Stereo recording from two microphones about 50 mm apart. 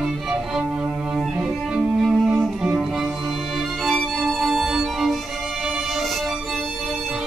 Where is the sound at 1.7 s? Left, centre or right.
Centre.